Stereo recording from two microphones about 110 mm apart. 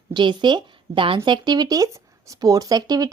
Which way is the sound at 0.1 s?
45° right (ahead or behind).